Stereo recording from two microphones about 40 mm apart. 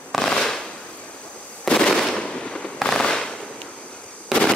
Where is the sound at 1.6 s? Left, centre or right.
Centre.